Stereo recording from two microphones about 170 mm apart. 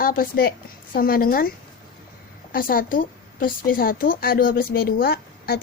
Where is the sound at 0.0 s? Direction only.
55° left (ahead or behind).